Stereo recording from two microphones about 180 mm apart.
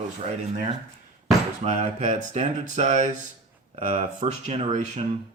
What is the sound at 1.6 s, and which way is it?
Speech, 40° right (ahead or behind).